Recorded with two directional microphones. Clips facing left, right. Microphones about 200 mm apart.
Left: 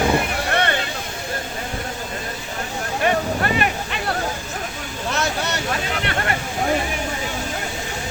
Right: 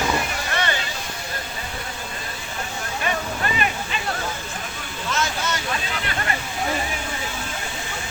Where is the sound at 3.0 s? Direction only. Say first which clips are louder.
Left 6 dB; 55° left (ahead or behind).